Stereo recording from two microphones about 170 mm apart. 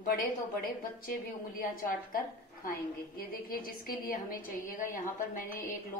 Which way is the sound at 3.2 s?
60° left (ahead or behind).